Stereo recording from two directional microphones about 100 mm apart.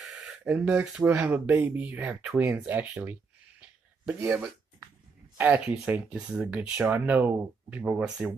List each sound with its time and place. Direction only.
0.0 s a sound: 5° right (ahead or behind)
0.4 s speech: 15° right (ahead or behind)
5.4 s speech: 20° right (ahead or behind)